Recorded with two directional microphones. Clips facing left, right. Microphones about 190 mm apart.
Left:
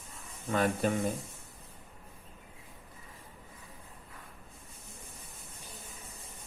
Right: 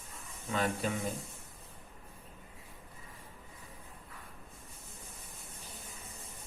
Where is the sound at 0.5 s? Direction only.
50° left (ahead or behind).